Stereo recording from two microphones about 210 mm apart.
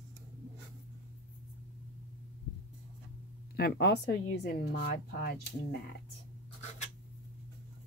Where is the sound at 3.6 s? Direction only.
50° left (ahead or behind).